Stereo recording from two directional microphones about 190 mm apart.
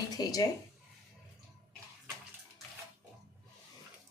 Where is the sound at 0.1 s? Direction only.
20° left (ahead or behind).